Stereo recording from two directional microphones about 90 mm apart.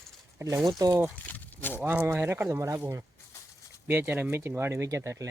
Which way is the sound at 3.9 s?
20° right (ahead or behind).